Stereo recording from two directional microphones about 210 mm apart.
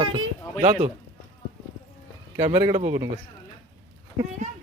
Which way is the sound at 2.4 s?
20° right (ahead or behind).